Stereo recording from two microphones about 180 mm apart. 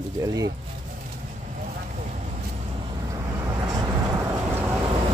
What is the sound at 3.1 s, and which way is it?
Vehicle, 20° right (ahead or behind).